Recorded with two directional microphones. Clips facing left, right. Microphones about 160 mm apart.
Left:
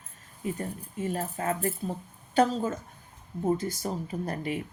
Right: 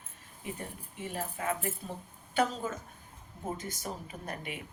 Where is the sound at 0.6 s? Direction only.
40° left (ahead or behind).